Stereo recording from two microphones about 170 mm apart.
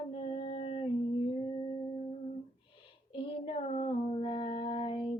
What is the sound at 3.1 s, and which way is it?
Female singing, 30° left (ahead or behind).